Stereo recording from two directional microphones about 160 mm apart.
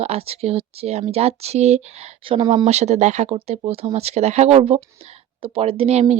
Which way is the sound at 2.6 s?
45° right (ahead or behind).